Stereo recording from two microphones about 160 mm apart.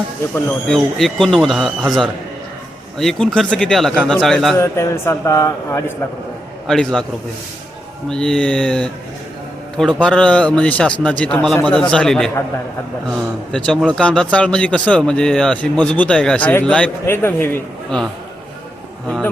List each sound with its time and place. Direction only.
0.7 s speech: centre (ahead or behind)
4.5 s a man's voice: 20° left (ahead or behind)
6.7 s speech: 5° left (ahead or behind)
8.1 s speech: 5° left (ahead or behind)